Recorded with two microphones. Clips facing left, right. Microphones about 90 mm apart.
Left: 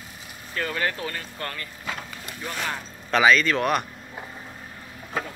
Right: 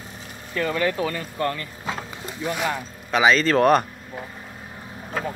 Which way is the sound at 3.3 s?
35° right (ahead or behind).